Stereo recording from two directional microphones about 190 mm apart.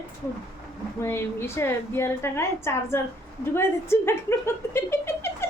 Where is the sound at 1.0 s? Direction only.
10° left (ahead or behind).